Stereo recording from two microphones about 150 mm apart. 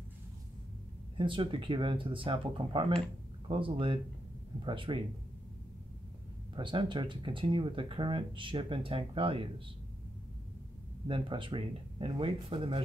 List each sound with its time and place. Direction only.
1.1 s speech: 35° right (ahead or behind)
6.5 s speech: 35° right (ahead or behind)
11.1 s speech: 35° right (ahead or behind)